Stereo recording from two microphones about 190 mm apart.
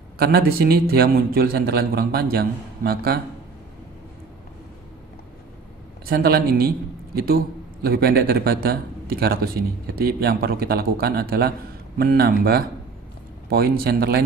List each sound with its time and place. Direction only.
0.2 s a man's voice: 55° right (ahead or behind)
6.0 s a man's voice: 55° right (ahead or behind)